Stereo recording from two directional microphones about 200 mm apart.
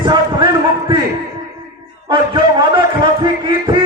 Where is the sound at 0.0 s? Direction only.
25° right (ahead or behind).